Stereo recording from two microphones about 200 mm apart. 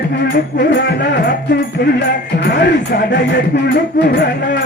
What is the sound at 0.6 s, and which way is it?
Speech, 55° left (ahead or behind).